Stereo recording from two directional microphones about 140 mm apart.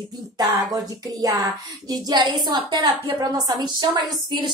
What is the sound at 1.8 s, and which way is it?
A woman's voice, 30° right (ahead or behind).